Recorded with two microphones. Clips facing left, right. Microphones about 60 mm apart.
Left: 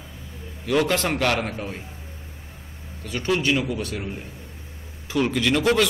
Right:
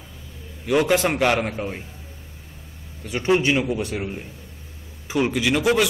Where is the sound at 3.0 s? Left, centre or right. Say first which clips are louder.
Right 4 dB; right.